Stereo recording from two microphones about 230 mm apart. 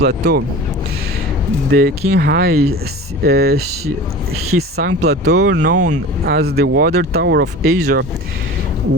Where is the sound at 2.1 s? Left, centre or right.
Right.